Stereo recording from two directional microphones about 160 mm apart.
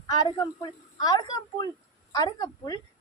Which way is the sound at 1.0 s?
25° left (ahead or behind).